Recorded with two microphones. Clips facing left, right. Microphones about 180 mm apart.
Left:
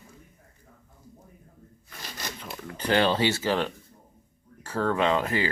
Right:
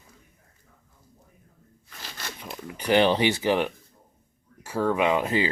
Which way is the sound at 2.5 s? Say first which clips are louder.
Right 3 dB; 15° right (ahead or behind).